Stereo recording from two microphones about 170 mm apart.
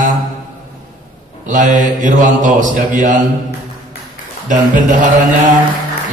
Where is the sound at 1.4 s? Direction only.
50° right (ahead or behind).